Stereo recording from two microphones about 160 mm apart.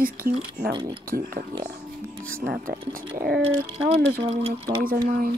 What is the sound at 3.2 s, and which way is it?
Speech, 70° right (ahead or behind).